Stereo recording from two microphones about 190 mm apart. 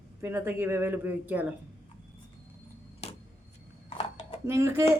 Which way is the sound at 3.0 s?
30° left (ahead or behind).